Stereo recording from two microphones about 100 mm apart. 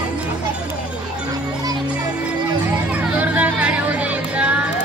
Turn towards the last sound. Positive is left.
turn(degrees=-15)  # may be behind; listen again after turning